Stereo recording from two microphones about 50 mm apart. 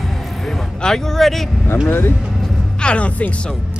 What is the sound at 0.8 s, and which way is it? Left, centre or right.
Speech, centre.